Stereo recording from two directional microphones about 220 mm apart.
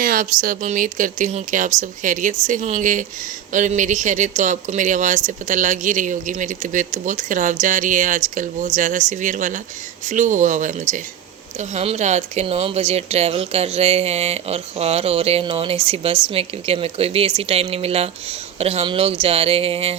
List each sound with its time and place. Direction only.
0.0 s speech: 40° right (ahead or behind)